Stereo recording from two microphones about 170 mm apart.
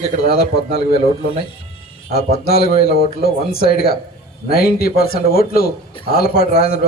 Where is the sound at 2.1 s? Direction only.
65° left (ahead or behind).